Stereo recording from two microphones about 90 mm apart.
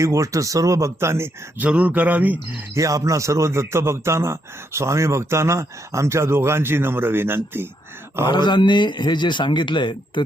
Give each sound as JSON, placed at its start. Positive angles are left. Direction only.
{"t": 0.0, "sound": "speech", "side_deg": -35}
{"t": 1.6, "sound": "speech", "side_deg": -15}
{"t": 2.7, "sound": "speech", "side_deg": -40}
{"t": 8.3, "sound": "speech", "side_deg": 55}